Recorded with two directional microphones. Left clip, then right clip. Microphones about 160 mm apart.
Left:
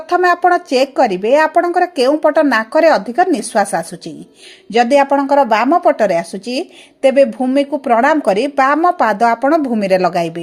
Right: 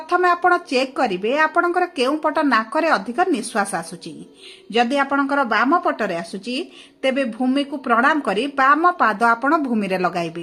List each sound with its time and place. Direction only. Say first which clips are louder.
0.1 s speech: left 5 dB; 35° left (ahead or behind)